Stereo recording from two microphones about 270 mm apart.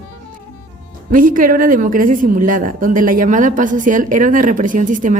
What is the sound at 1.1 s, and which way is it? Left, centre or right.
A woman's voice, right.